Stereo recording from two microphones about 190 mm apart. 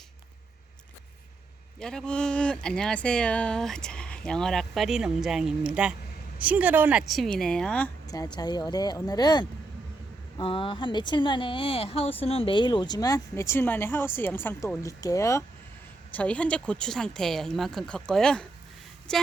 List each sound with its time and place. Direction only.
1.8 s speech: 5° left (ahead or behind)
8.0 s speech: 20° left (ahead or behind); by 19.2 s 5° left (ahead or behind)